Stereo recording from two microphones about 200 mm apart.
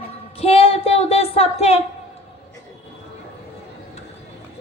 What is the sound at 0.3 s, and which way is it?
A woman's voice, 30° left (ahead or behind).